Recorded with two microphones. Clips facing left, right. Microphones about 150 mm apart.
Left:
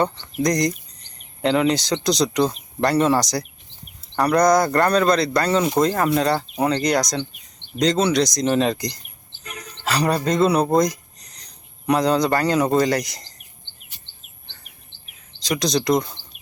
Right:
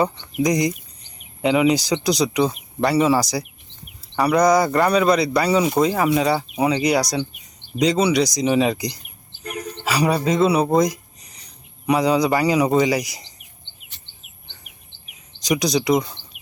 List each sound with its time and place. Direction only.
0.0 s speech: 10° right (ahead or behind)
14.4 s bird vocalization: 15° right (ahead or behind)
15.1 s a sound: 15° right (ahead or behind)
16.3 s bird: 15° right (ahead or behind)